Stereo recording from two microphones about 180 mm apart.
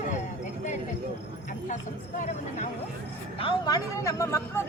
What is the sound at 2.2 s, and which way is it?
Speech, 40° left (ahead or behind).